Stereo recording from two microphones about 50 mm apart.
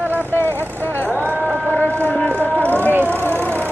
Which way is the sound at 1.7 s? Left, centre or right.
Left.